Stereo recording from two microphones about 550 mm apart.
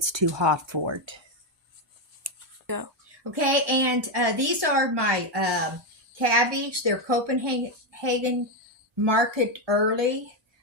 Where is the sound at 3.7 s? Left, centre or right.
Right.